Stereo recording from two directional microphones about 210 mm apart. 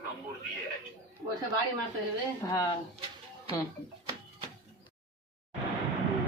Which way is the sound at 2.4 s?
15° left (ahead or behind).